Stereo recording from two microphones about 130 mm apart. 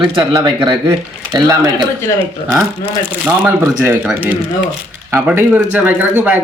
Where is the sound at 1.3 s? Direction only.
35° right (ahead or behind).